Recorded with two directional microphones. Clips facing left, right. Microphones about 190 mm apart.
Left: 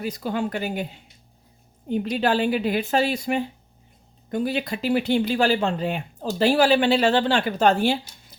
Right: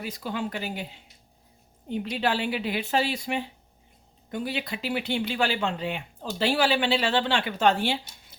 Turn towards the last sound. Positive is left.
turn(degrees=45)  # may be behind; listen again after turning